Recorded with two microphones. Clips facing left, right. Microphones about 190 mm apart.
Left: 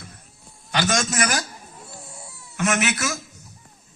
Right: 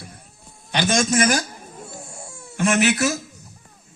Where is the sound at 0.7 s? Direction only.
20° right (ahead or behind).